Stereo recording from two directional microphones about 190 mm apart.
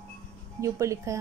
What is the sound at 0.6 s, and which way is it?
Speech, 15° right (ahead or behind).